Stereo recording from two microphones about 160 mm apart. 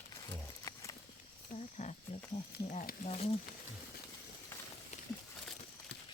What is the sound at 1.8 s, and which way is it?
Speech, 45° left (ahead or behind).